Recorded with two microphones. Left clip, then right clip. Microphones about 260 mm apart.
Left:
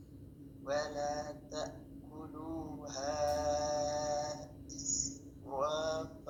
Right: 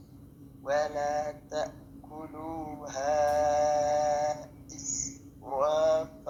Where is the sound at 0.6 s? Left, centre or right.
Right.